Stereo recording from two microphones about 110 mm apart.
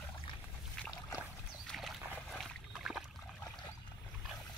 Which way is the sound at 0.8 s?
5° left (ahead or behind).